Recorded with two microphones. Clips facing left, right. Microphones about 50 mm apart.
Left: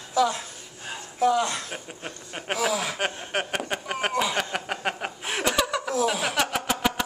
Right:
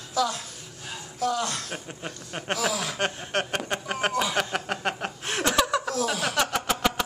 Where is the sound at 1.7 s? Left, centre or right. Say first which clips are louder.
Right 1 dB; centre.